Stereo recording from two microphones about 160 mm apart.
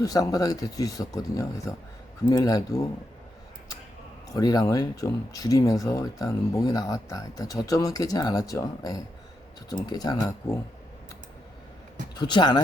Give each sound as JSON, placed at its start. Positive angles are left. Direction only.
{"t": 0.0, "sound": "speech", "side_deg": 25}
{"t": 4.4, "sound": "speech", "side_deg": 25}
{"t": 12.2, "sound": "speech", "side_deg": 30}